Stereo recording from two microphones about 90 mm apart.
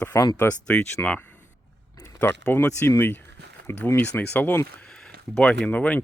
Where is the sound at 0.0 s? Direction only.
40° left (ahead or behind).